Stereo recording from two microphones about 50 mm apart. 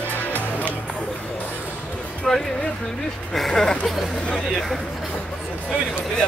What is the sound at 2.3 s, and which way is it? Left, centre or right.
Music, centre.